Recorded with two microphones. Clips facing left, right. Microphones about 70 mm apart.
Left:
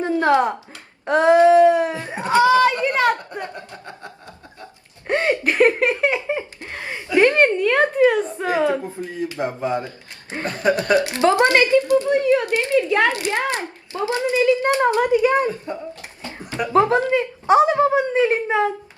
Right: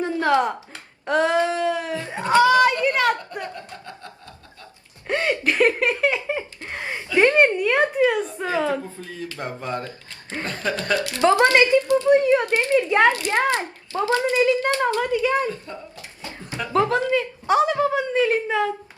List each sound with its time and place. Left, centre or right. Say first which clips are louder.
0.0 s a sound: left 3 dB; left
1.0 s speech: left 7 dB; left
5.0 s a sound: left 3 dB; left
6.7 s a sound: left 2 dB; right
8.4 s speech: left 3 dB; centre
9.4 s speech: left 5 dB; centre
11.5 s a child's voice: left 1 dB; right
11.8 s speech: left 3 dB; left
12.0 s a child's voice: right 1 dB; right
14.5 s speech: left 4 dB; left